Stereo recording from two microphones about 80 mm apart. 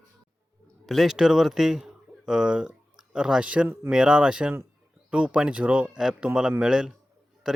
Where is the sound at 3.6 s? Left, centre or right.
Right.